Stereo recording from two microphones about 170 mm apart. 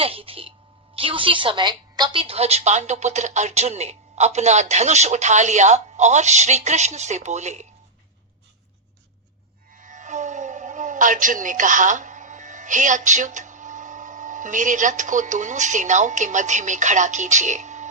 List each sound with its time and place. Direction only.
0.0 s a woman's voice: 35° right (ahead or behind)
9.7 s speech: 50° right (ahead or behind)